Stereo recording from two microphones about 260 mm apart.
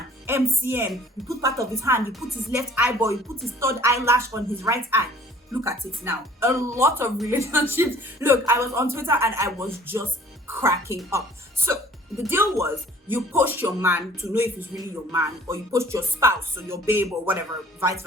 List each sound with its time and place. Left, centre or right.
0.3 s speech: centre
12.2 s speech: centre